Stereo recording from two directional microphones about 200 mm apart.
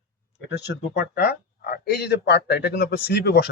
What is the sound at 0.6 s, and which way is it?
Speech, 50° left (ahead or behind).